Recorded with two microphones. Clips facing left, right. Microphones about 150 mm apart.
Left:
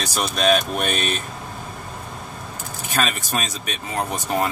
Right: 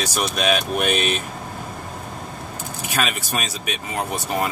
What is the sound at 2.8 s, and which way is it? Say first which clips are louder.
Speech: left 1 dB; 10° right (ahead or behind).